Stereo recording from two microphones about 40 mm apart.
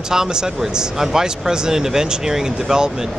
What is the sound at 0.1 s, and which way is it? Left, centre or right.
Speech, centre.